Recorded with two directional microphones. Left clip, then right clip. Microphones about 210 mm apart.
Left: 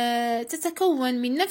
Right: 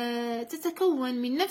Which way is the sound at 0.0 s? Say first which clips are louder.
Left 7 dB; 30° left (ahead or behind).